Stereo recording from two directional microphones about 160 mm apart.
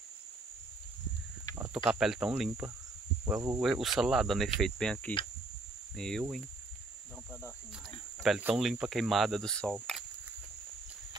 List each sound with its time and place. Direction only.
1.7 s speech: 5° right (ahead or behind)
3.3 s cricket: 20° right (ahead or behind)
3.6 s speech: centre (ahead or behind)
8.2 s speech: 5° right (ahead or behind)